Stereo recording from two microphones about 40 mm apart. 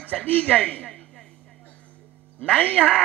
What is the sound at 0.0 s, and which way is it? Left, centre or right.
Speech, left.